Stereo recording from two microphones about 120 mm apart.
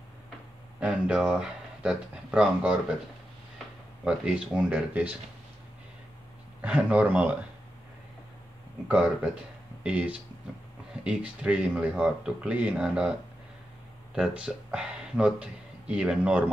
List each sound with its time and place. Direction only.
0.7 s speech: 10° right (ahead or behind)
4.6 s speech: 10° right (ahead or behind)
6.6 s speech: 10° right (ahead or behind)
8.8 s speech: 10° right (ahead or behind)
14.1 s speech: 10° right (ahead or behind)